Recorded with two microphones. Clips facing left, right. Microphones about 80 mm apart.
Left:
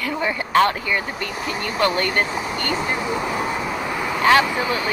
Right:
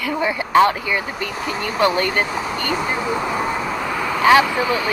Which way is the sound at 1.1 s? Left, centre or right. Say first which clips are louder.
Right 2 dB; centre.